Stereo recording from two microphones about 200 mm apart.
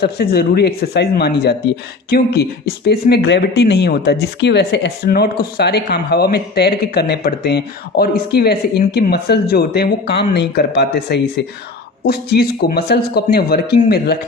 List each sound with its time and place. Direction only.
0.0 s speech: 50° left (ahead or behind)